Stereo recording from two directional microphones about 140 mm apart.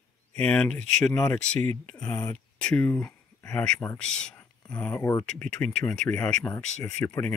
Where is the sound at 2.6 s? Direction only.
5° left (ahead or behind).